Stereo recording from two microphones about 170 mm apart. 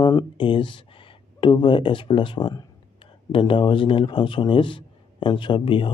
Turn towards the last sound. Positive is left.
turn(degrees=30)  # may be behind; listen again after turning